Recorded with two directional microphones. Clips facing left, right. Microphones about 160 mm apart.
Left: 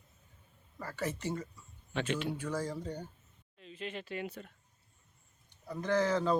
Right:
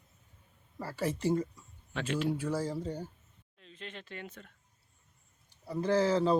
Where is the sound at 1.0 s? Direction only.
35° right (ahead or behind).